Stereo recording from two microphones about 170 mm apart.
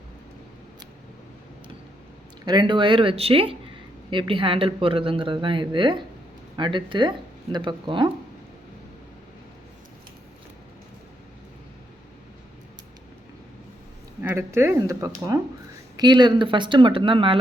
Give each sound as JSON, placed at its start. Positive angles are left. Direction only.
{"t": 2.4, "sound": "speech", "side_deg": -25}
{"t": 14.2, "sound": "speech", "side_deg": -15}